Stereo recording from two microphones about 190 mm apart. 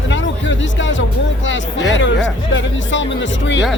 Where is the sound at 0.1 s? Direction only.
75° left (ahead or behind).